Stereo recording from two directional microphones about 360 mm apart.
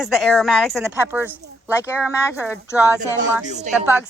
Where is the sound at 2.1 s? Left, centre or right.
Centre.